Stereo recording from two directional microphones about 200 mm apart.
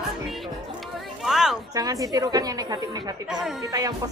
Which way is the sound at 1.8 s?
15° right (ahead or behind).